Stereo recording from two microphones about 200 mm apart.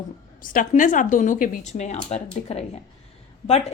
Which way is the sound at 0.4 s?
40° left (ahead or behind).